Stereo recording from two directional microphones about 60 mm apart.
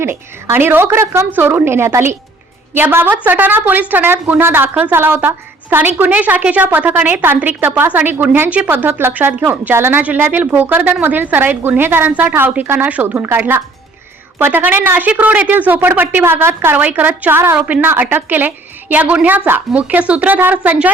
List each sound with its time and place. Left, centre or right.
0.5 s a woman's voice: right
4.7 s a woman's voice: right
4.9 s a woman's voice: right
16.7 s a woman's voice: right